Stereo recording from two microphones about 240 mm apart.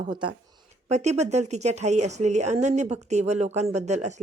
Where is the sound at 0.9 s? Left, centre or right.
Right.